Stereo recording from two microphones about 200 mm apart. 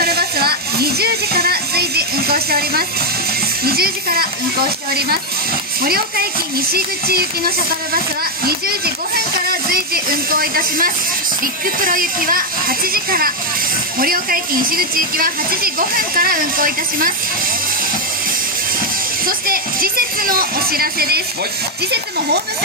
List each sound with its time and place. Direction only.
0.0 s music: 50° right (ahead or behind)
3.6 s a woman's voice: 50° right (ahead or behind)
19.2 s a woman's voice: 45° right (ahead or behind)